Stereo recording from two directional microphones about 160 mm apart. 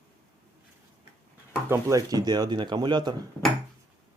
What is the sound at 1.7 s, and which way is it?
Speech, 20° right (ahead or behind).